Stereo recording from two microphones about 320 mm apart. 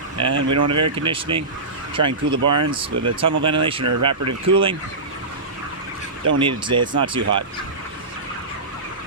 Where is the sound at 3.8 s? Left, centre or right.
Right.